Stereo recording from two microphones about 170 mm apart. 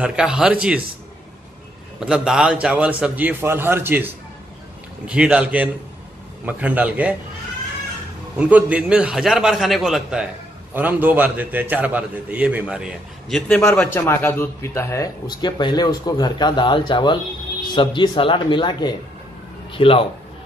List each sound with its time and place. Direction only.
0.0 s a man's voice: 5° right (ahead or behind)
2.0 s a man's voice: 5° right (ahead or behind)
8.4 s a man's voice: 10° right (ahead or behind)
13.5 s a man's voice: 5° left (ahead or behind); by 20.1 s 35° left (ahead or behind)